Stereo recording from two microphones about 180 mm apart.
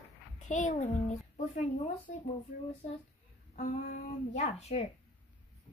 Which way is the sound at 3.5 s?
45° left (ahead or behind).